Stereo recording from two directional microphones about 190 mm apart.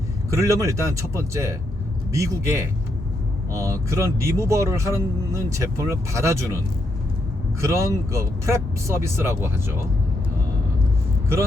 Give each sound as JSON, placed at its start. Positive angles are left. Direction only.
{"t": 0.3, "sound": "speech", "side_deg": -15}
{"t": 7.6, "sound": "speech", "side_deg": -15}